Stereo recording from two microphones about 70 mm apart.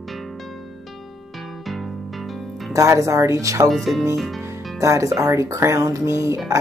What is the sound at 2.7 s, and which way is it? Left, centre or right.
Speech, right.